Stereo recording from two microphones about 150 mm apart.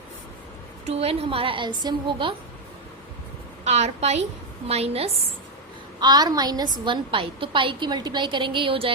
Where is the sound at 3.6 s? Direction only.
45° right (ahead or behind).